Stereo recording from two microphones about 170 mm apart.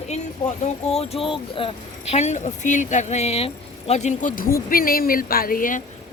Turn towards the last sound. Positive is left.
turn(degrees=55)  # may be behind; listen again after turning